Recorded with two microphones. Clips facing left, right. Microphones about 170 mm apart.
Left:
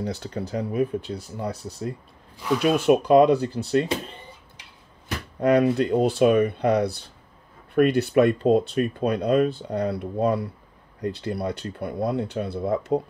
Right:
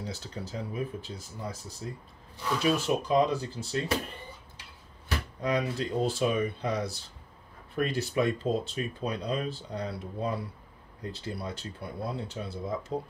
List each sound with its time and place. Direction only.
0.0 s speech: 60° left (ahead or behind)
5.4 s speech: 60° left (ahead or behind)